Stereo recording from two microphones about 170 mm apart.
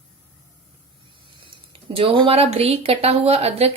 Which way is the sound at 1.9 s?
35° right (ahead or behind).